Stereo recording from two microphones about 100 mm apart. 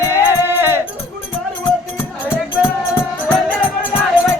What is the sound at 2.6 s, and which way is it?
Music, 5° right (ahead or behind).